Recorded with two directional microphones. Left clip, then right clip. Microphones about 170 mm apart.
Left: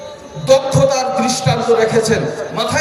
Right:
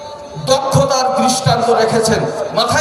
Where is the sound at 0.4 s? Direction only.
30° right (ahead or behind).